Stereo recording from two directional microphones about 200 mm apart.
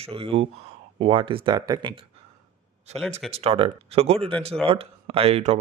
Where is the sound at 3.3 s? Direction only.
30° right (ahead or behind).